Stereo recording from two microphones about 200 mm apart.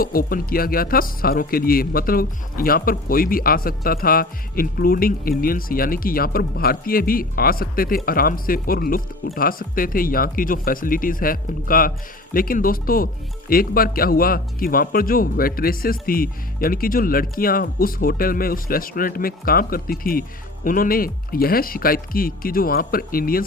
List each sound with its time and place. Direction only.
0.0 s speech: 45° left (ahead or behind)